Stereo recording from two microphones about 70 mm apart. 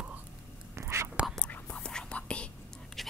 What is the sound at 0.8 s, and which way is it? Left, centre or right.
Whispering, right.